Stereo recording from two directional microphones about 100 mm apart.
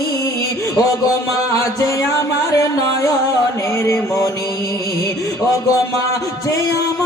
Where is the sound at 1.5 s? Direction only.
35° left (ahead or behind).